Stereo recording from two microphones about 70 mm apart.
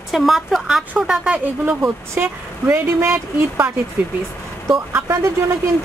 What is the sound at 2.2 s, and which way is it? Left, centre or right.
Speech, right.